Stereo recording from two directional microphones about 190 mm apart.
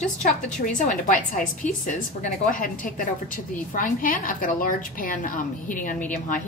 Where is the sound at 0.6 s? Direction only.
40° left (ahead or behind).